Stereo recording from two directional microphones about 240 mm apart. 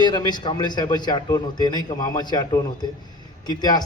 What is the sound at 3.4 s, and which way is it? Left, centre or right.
Speech, centre.